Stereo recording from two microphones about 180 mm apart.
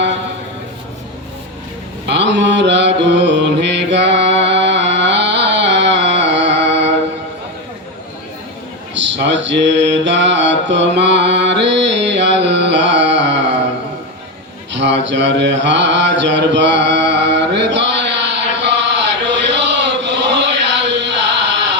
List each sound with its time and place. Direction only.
2.0 s mantra: 75° right (ahead or behind)
4.9 s music: 75° right (ahead or behind)
9.0 s mantra: 75° right (ahead or behind)
14.7 s mantra: 80° right
18.5 s chant: 80° right